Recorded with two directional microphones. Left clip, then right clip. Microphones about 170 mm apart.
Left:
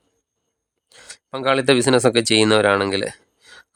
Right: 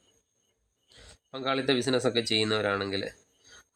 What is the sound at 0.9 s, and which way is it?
Speech, 45° left (ahead or behind).